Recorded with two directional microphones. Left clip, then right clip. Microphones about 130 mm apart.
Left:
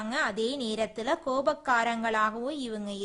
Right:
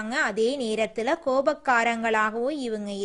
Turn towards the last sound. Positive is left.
turn(degrees=-25)  # may be behind; listen again after turning